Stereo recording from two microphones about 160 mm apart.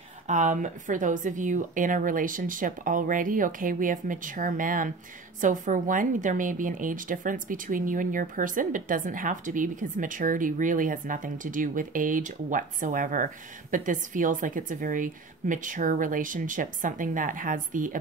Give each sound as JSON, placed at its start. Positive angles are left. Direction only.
{"t": 0.3, "sound": "a woman's voice", "side_deg": -50}